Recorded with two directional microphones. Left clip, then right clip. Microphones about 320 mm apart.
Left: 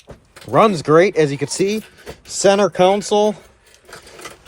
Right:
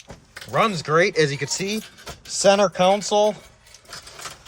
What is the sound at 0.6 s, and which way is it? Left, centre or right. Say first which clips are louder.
Speech: left 7 dB; centre.